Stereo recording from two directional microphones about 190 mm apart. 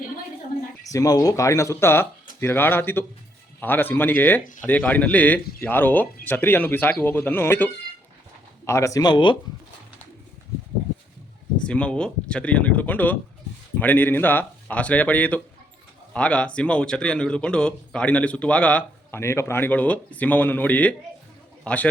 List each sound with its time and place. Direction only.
0.9 s speech: 20° left (ahead or behind)
11.6 s a man's voice: 5° left (ahead or behind)